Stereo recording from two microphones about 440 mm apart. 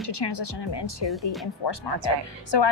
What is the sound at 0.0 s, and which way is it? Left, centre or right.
A woman's voice, left.